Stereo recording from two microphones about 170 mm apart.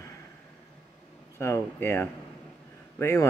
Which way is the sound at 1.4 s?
15° left (ahead or behind).